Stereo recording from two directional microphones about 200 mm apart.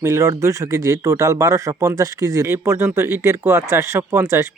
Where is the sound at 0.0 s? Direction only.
15° right (ahead or behind).